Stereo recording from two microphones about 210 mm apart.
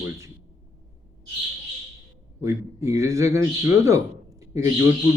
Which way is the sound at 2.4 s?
15° right (ahead or behind).